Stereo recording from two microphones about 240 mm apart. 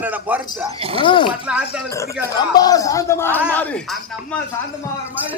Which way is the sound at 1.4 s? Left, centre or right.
Centre.